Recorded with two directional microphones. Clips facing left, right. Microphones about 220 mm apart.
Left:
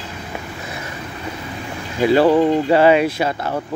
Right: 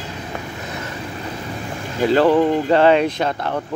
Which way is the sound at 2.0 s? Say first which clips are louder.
Left 1 dB; 10° left (ahead or behind).